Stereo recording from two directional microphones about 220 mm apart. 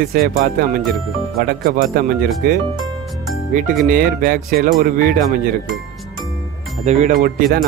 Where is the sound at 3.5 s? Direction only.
35° right (ahead or behind).